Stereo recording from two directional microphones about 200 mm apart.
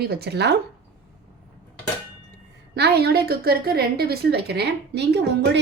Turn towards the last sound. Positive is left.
turn(degrees=-60)  # may be behind; listen again after turning